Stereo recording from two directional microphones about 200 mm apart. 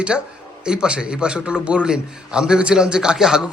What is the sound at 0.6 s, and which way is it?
A man's voice, 5° right (ahead or behind).